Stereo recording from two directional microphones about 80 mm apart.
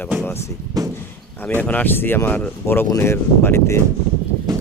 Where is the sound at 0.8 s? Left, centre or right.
Right.